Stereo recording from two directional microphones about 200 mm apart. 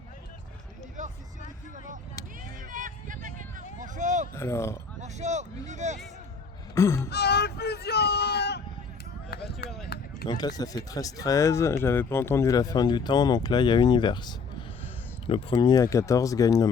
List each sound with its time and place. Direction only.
2.6 s a sound: 40° right (ahead or behind)
4.4 s speech: 15° left (ahead or behind)
4.9 s speech: 35° right (ahead or behind)
6.7 s speech: 15° left (ahead or behind)
7.1 s speech: 55° left (ahead or behind)
9.6 s a sound: centre (ahead or behind)
10.2 s speech: 20° left (ahead or behind)